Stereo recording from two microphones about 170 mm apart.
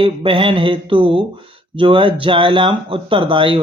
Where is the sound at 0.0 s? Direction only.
30° right (ahead or behind).